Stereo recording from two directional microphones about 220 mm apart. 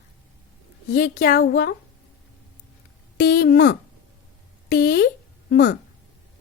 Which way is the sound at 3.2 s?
40° left (ahead or behind).